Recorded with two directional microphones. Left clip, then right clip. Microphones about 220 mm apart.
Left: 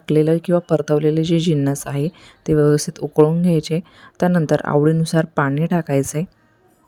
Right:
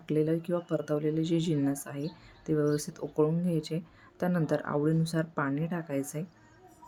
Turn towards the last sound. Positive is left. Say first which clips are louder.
# left 14 dB
turn(degrees=40)  # may be behind; listen again after turning